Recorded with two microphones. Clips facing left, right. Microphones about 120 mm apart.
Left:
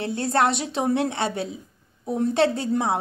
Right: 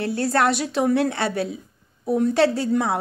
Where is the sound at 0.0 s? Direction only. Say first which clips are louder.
Right 1 dB; 25° left (ahead or behind).